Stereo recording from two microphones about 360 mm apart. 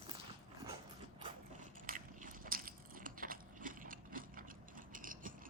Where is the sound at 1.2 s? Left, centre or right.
Right.